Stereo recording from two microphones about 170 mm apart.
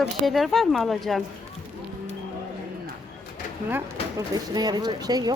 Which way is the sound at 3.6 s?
15° right (ahead or behind).